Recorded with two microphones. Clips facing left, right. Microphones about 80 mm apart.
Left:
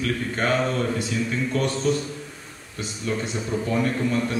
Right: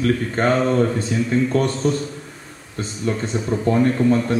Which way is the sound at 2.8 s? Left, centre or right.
Right.